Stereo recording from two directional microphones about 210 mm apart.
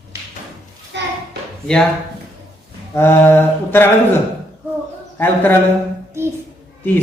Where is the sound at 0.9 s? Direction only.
55° right (ahead or behind).